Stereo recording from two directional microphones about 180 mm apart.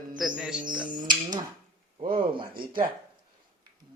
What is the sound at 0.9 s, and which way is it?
Music, 25° right (ahead or behind).